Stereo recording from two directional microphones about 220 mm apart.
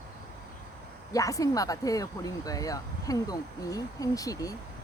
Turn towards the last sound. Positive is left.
turn(degrees=15)  # may be behind; listen again after turning